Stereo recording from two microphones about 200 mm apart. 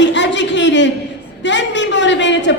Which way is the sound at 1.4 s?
65° left (ahead or behind).